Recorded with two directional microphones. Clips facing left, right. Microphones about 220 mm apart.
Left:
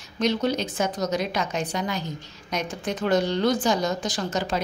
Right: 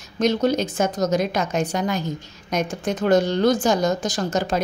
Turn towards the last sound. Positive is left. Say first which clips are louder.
# right 4 dB
turn(degrees=-45)  # may be behind; listen again after turning